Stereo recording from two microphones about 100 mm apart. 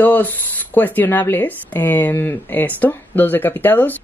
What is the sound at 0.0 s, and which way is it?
A woman's voice, 20° left (ahead or behind).